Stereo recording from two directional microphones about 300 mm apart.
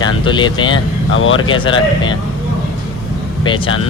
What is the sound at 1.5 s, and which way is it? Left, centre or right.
Speech, centre.